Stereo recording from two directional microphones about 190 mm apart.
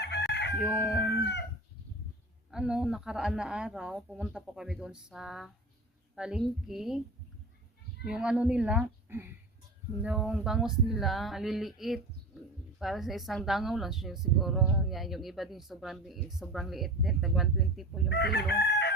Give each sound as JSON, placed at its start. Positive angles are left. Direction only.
{"t": 0.0, "sound": "chicken", "side_deg": 60}
{"t": 0.6, "sound": "crowing", "side_deg": -5}
{"t": 1.1, "sound": "chicken", "side_deg": 60}
{"t": 2.5, "sound": "a woman's voice", "side_deg": -5}
{"t": 8.0, "sound": "a woman's voice", "side_deg": -5}
{"t": 18.1, "sound": "chicken", "side_deg": 60}